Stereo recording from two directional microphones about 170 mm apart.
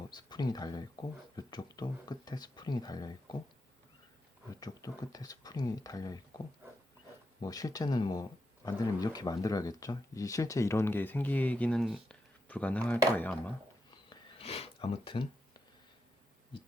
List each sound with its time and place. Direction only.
0.1 s speech: 25° left (ahead or behind)
4.6 s speech: 20° left (ahead or behind)
7.4 s speech: 20° left (ahead or behind)
14.1 s a sound: 35° left (ahead or behind)